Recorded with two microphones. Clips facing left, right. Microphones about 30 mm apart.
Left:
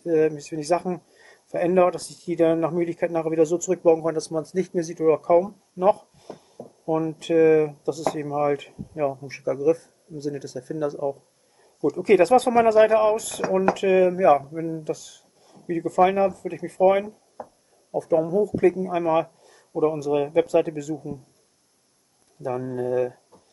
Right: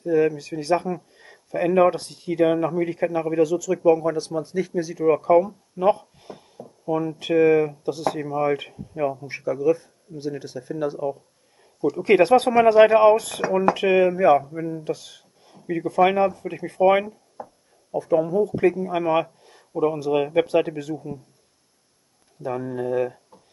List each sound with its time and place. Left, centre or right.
0.0 s speech: right
17.4 s a sound: centre
17.9 s speech: right
22.4 s speech: right